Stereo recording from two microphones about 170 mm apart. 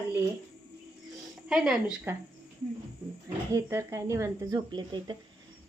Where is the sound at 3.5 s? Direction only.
20° right (ahead or behind).